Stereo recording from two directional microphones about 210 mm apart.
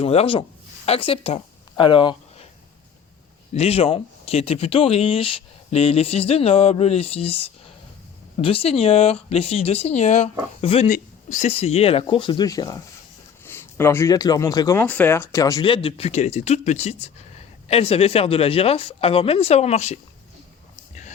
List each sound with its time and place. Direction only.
0.0 s speech: 30° left (ahead or behind)
0.9 s a sound: 25° left (ahead or behind)
3.5 s speech: 30° left (ahead or behind)
10.8 s speech: 40° left (ahead or behind)